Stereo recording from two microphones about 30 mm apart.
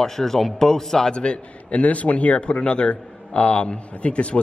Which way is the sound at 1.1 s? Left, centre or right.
Left.